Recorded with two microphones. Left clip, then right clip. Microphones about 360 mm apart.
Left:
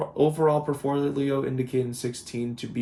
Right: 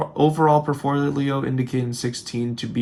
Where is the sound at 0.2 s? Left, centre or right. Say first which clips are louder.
Right 5 dB; centre.